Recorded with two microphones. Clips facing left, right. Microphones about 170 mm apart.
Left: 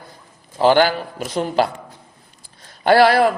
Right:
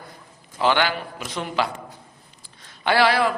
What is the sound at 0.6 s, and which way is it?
A man's voice, 40° left (ahead or behind).